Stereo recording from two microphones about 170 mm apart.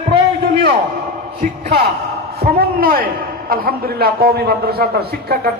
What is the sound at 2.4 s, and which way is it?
A man's voice, 60° right (ahead or behind).